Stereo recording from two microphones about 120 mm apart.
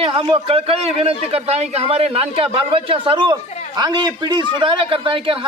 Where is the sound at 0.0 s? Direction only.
45° right (ahead or behind).